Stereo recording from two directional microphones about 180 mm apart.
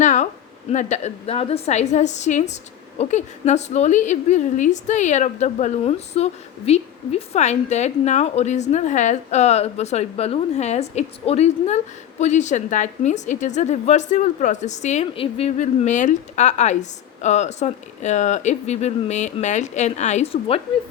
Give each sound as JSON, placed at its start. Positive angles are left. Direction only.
{"t": 0.0, "sound": "a woman's voice", "side_deg": 40}